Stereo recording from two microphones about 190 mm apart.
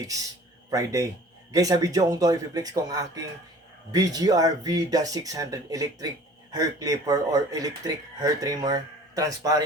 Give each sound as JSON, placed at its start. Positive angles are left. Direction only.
{"t": 0.0, "sound": "a man's voice", "side_deg": -20}